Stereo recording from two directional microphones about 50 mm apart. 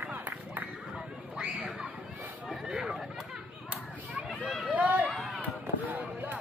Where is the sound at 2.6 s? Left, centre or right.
Centre.